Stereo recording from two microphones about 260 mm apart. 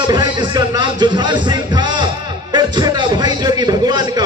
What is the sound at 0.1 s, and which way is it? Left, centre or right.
Speech, centre.